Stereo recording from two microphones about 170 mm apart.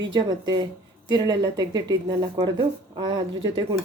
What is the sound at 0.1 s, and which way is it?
Speech, 25° right (ahead or behind).